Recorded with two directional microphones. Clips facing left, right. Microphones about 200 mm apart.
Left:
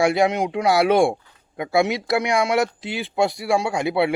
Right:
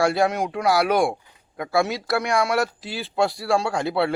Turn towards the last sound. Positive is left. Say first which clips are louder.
# left 2 dB
turn(degrees=15)  # may be behind; listen again after turning